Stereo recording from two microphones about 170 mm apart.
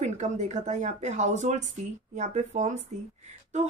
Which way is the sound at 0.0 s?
45° right (ahead or behind).